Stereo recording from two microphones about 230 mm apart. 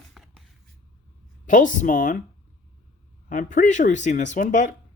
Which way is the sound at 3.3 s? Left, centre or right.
Left.